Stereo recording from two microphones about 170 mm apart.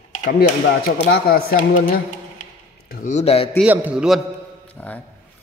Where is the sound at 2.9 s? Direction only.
60° left (ahead or behind).